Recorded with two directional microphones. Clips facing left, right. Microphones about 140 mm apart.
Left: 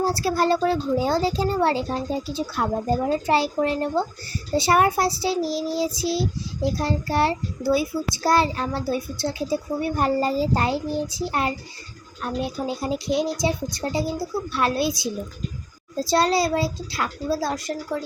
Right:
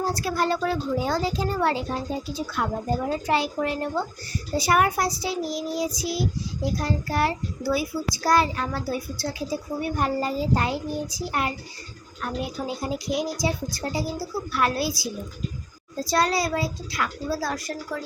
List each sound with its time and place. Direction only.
0.0 s a child's voice: 30° left (ahead or behind)